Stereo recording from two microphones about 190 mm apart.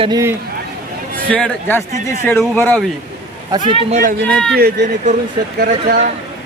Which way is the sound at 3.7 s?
35° right (ahead or behind).